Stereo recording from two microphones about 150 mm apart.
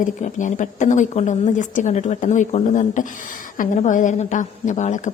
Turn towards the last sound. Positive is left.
turn(degrees=55)  # may be behind; listen again after turning